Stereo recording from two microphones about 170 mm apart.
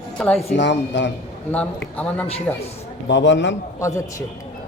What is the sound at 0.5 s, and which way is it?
Speech, 90° left.